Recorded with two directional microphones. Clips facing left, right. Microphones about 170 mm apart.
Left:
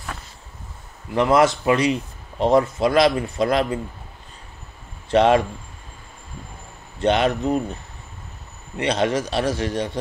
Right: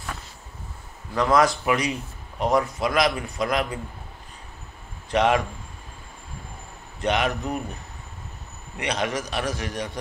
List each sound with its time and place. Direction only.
1.1 s speech: 25° left (ahead or behind)
5.1 s speech: 30° left (ahead or behind)
7.0 s speech: 30° left (ahead or behind)
8.7 s speech: 30° left (ahead or behind)